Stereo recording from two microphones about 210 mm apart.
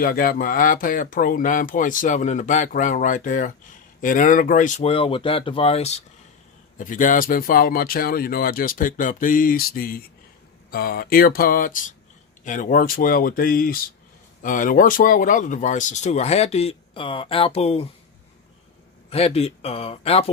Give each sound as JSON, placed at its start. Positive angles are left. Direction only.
{"t": 0.0, "sound": "speech", "side_deg": 45}
{"t": 19.1, "sound": "speech", "side_deg": 30}